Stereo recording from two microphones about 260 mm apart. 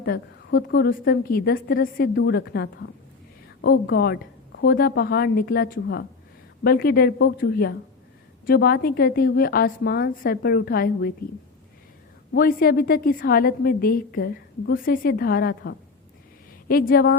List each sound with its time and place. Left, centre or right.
0.0 s a woman's voice: left
12.3 s a woman's voice: left